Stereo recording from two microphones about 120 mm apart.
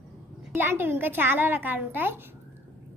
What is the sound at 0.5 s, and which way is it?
A child's voice, 20° right (ahead or behind).